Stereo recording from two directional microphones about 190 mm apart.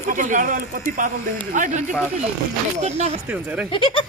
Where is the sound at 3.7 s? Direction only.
25° left (ahead or behind).